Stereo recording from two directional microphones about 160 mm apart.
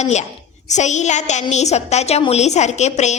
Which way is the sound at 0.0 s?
45° left (ahead or behind).